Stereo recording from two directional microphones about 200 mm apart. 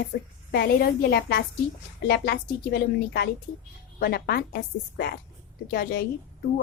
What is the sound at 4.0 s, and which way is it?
A woman's voice, 50° left (ahead or behind).